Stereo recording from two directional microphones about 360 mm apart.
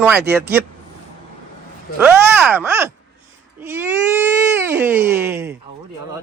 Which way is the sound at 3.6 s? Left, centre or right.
Centre.